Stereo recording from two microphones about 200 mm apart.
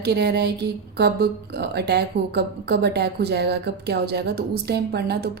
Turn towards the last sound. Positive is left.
turn(degrees=-55)  # may be behind; listen again after turning